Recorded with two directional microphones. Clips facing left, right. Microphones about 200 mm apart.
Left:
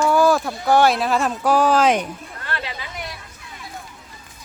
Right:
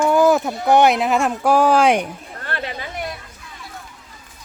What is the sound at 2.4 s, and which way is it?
Chatter, 50° right (ahead or behind).